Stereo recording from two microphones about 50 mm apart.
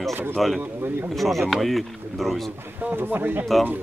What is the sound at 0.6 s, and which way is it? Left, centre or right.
Speech, right.